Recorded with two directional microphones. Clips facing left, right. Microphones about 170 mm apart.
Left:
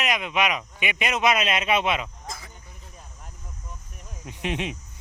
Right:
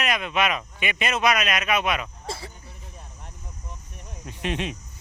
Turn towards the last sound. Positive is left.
turn(degrees=15)  # may be behind; listen again after turning